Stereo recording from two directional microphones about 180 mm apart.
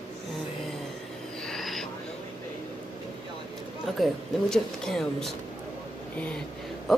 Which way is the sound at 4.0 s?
5° left (ahead or behind).